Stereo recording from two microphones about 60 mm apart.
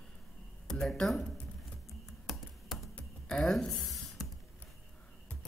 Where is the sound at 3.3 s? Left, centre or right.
Centre.